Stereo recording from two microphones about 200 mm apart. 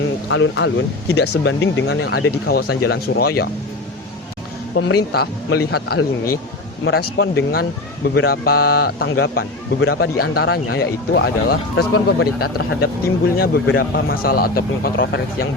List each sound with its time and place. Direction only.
0.3 s speech: 70° left (ahead or behind); by 3.5 s 50° left (ahead or behind)
4.7 s speech: 60° left (ahead or behind)